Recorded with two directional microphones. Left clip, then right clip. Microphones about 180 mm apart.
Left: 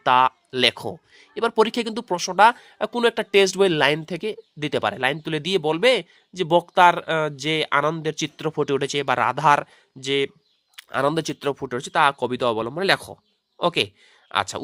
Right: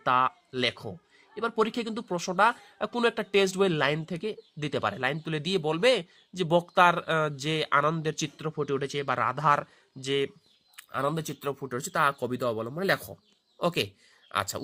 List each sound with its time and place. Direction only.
0.0 s speech: 35° left (ahead or behind)
8.4 s a man's voice: 40° left (ahead or behind)
10.8 s a man's voice: 35° left (ahead or behind)